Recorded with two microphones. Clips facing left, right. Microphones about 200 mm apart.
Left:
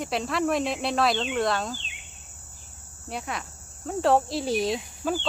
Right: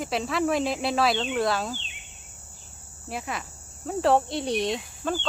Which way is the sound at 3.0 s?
Centre (ahead or behind).